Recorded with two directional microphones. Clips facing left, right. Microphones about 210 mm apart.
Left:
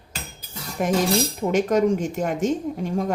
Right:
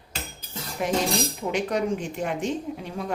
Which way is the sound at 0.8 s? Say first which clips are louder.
Left 4 dB; 50° left (ahead or behind).